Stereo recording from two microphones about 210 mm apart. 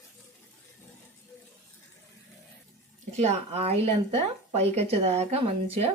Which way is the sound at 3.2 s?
30° right (ahead or behind).